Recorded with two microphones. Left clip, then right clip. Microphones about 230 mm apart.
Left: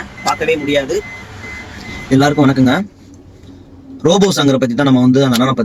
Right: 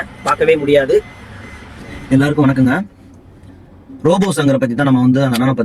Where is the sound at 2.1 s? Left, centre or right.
Centre.